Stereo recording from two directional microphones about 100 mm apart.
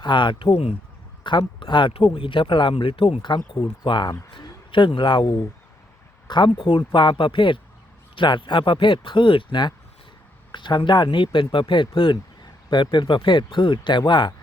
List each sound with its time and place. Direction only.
0.0 s speech: 50° left (ahead or behind)
3.2 s a man's voice: 50° left (ahead or behind)